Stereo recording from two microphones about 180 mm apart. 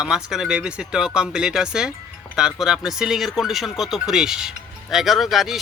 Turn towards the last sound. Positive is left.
turn(degrees=0)  # may be behind; listen again after turning